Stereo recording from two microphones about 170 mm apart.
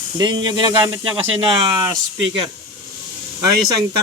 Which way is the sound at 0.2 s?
25° right (ahead or behind).